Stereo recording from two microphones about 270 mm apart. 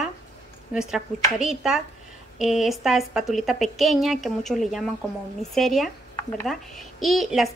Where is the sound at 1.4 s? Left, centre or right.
Centre.